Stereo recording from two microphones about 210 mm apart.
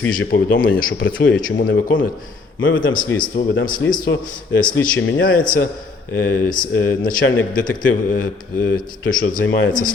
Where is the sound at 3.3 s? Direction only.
50° left (ahead or behind).